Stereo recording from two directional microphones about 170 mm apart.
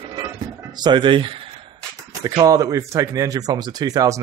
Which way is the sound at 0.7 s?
25° right (ahead or behind).